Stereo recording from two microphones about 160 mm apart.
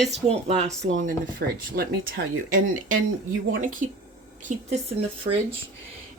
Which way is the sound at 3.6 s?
55° right (ahead or behind).